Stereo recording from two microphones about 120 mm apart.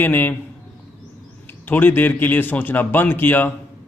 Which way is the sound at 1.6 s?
15° left (ahead or behind).